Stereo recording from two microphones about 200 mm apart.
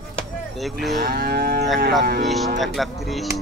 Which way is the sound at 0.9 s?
50° right (ahead or behind).